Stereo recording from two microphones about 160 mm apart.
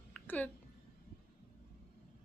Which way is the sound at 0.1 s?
10° left (ahead or behind).